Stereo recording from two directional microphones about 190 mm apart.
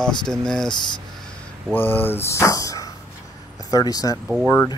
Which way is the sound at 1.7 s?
10° left (ahead or behind).